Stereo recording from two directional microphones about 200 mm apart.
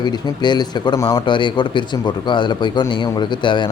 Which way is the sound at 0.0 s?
20° left (ahead or behind).